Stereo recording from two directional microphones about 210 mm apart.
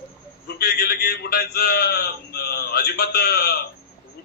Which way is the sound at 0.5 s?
50° left (ahead or behind).